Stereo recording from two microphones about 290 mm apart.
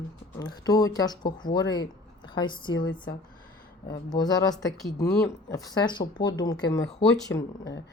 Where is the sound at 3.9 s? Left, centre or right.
Centre.